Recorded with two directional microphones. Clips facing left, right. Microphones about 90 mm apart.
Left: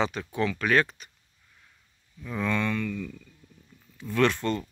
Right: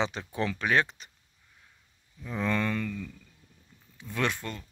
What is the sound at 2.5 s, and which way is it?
Speech, 35° right (ahead or behind).